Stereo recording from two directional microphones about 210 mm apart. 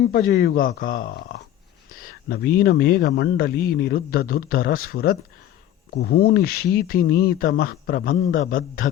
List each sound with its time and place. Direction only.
0.1 s a man's voice: 50° left (ahead or behind)
1.9 s whispering: 45° left (ahead or behind)
2.6 s a man's voice: 45° left (ahead or behind)